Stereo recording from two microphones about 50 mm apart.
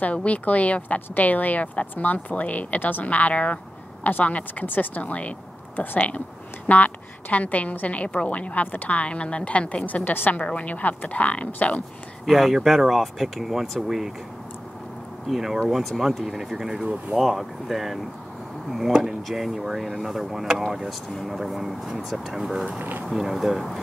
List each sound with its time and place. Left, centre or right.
0.0 s a woman's voice: left
9.8 s speech: left
10.4 s a woman's voice: left
12.3 s speech: centre
15.2 s speech: centre
16.8 s speech: right
17.2 s speech: centre
22.8 s speech: right
23.0 s speech: centre